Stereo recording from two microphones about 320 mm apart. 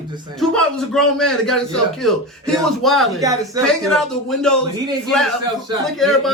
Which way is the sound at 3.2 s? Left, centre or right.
Centre.